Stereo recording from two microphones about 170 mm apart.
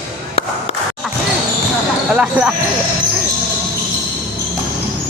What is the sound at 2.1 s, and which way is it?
Speech, 5° right (ahead or behind).